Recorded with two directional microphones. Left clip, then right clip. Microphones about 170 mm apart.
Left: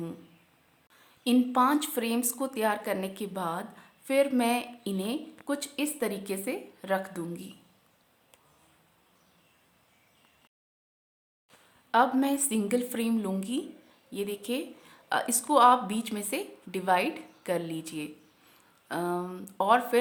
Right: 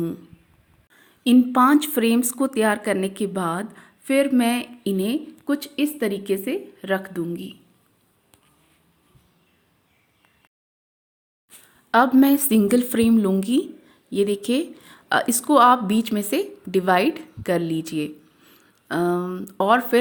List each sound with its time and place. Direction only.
0.9 s a woman's voice: 30° right (ahead or behind)
11.9 s a woman's voice: 30° right (ahead or behind)